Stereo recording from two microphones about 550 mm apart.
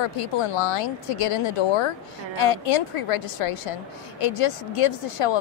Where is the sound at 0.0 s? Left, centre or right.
Left.